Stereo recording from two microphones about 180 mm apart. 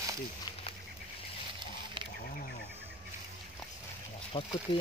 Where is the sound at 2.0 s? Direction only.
30° right (ahead or behind).